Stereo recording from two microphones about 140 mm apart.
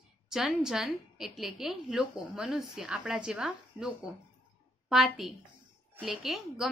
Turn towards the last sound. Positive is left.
turn(degrees=0)  # may be behind; listen again after turning